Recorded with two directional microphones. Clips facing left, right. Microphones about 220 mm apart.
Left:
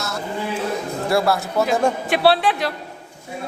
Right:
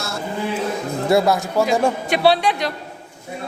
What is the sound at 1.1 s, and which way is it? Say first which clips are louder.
Speech: right 3 dB; 20° right (ahead or behind).